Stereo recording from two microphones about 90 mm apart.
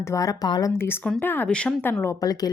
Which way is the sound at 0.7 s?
25° left (ahead or behind).